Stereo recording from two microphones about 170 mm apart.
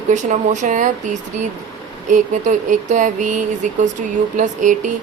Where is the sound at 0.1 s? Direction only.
45° right (ahead or behind).